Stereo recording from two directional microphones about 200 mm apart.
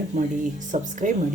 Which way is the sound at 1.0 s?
40° right (ahead or behind).